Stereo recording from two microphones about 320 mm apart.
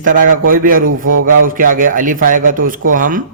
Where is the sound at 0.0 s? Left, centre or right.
Right.